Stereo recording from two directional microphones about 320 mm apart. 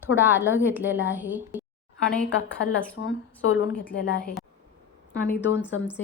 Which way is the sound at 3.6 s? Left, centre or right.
Left.